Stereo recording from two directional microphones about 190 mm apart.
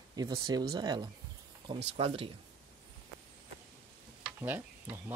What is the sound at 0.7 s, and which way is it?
Speech, 20° right (ahead or behind).